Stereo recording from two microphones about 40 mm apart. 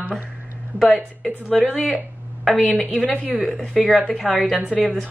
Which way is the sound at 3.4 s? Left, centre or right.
Centre.